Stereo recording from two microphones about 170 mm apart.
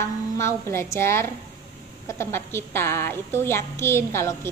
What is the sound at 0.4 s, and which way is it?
A woman's voice, 15° left (ahead or behind).